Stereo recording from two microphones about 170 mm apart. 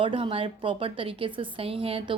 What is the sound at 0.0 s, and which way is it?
A woman's voice, 30° right (ahead or behind).